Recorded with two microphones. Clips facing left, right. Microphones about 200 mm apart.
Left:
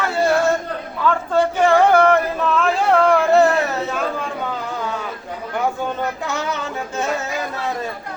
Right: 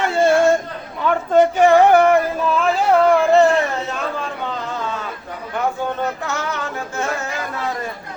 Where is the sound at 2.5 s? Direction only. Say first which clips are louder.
Right 1 dB; 5° right (ahead or behind).